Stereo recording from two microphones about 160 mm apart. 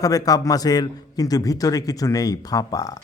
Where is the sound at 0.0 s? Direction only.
20° left (ahead or behind).